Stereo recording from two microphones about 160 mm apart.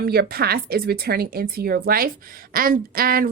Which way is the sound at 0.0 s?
75° right (ahead or behind).